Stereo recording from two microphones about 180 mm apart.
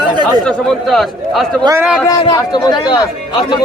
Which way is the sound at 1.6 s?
15° right (ahead or behind).